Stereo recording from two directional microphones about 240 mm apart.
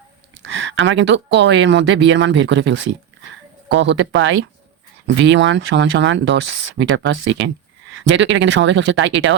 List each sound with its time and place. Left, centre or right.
0.4 s speech: right